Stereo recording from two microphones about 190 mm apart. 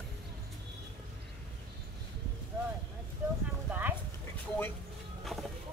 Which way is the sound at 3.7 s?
10° right (ahead or behind).